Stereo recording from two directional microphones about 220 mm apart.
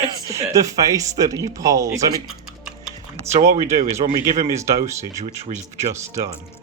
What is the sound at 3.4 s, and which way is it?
Speech, 15° right (ahead or behind).